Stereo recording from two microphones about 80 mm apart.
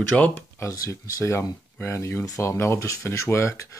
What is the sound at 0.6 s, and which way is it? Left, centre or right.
Speech, left.